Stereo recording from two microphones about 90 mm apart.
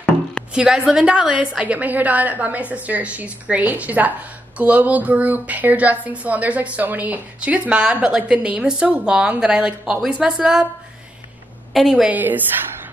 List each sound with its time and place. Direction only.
0.5 s speech: 10° right (ahead or behind)
11.7 s a woman's voice: 5° right (ahead or behind)
12.1 s a woman's voice: 20° right (ahead or behind)